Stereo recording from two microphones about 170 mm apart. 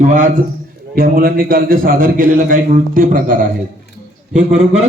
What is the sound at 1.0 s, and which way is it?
A man's voice, 60° right (ahead or behind).